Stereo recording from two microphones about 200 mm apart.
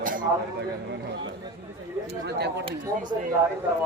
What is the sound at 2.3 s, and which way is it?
Speech, 55° right (ahead or behind).